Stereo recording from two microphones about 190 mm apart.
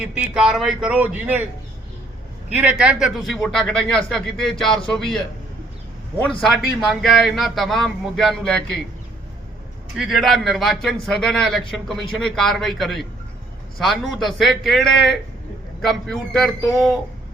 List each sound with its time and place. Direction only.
0.0 s speech: 5° right (ahead or behind)
2.5 s speech: 5° right (ahead or behind)
6.4 s speech: centre (ahead or behind)
10.0 s speech: centre (ahead or behind)